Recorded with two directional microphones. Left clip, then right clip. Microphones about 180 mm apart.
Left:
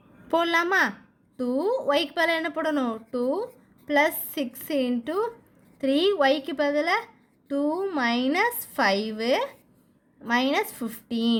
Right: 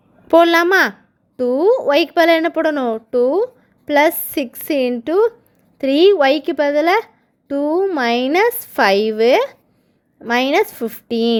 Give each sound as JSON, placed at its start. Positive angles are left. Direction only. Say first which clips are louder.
{"t": 0.3, "sound": "a woman's voice", "louder": "right 12 dB", "side_deg": -45}